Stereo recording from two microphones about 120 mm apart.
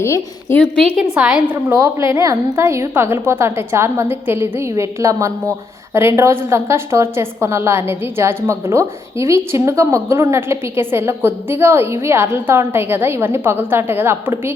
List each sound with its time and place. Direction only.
0.0 s a woman's voice: 25° left (ahead or behind)
0.5 s a woman's voice: 5° left (ahead or behind)
1.1 s a woman's voice: 10° right (ahead or behind)
1.8 s a woman's voice: 25° right (ahead or behind)